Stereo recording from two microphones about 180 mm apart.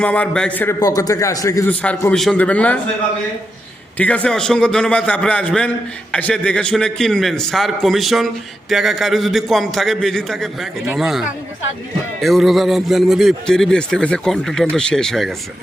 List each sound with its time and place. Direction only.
0.0 s a man's voice: 5° left (ahead or behind)
1.7 s a man's voice: 5° left (ahead or behind)
3.9 s a man's voice: 5° left (ahead or behind)